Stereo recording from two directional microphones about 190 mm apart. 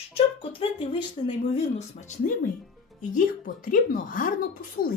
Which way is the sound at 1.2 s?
25° left (ahead or behind).